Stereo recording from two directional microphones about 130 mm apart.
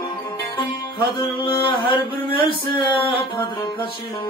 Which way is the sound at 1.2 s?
40° left (ahead or behind).